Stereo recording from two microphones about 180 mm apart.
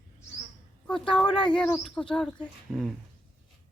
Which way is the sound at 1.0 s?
25° left (ahead or behind).